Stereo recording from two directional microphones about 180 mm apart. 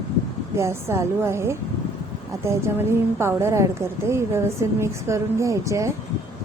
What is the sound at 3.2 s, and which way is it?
A woman's voice, 15° right (ahead or behind).